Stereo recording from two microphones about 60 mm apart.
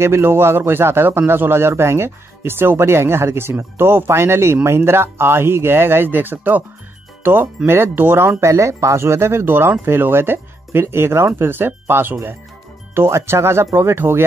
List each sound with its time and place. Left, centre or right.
0.0 s a man's voice: right
8.4 s a man's voice: right